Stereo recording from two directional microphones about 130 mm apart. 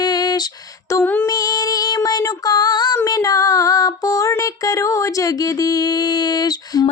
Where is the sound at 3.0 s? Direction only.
25° left (ahead or behind).